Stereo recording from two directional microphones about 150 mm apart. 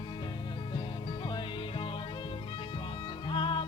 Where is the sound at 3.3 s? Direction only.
35° left (ahead or behind).